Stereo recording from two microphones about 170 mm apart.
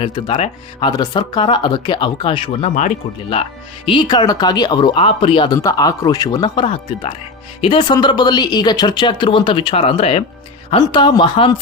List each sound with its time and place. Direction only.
0.0 s speech: 35° left (ahead or behind)
3.8 s speech: 25° left (ahead or behind)